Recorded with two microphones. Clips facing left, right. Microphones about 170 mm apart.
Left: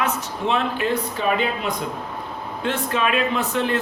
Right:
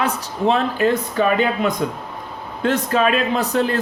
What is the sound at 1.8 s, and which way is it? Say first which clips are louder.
A man's voice: right 3 dB; 50° right (ahead or behind).